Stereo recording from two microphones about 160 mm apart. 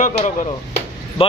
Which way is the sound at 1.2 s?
35° left (ahead or behind).